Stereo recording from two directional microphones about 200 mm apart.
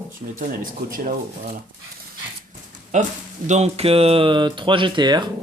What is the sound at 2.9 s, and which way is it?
Speech, 40° right (ahead or behind).